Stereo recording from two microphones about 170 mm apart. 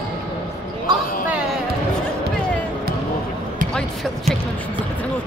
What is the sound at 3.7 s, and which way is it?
Music, centre (ahead or behind).